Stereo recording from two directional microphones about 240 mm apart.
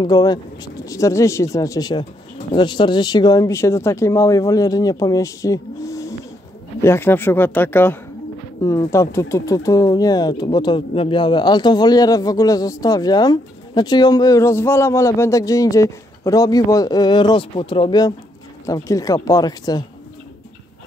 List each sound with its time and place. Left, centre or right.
0.0 s speech: centre